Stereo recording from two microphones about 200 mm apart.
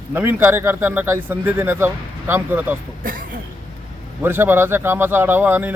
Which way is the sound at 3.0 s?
45° right (ahead or behind).